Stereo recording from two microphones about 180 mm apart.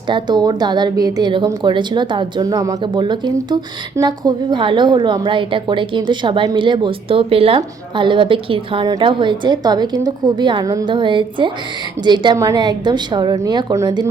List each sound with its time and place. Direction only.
0.1 s speech: 25° right (ahead or behind)